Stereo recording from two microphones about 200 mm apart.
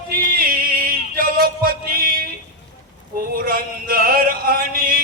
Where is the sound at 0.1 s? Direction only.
45° right (ahead or behind).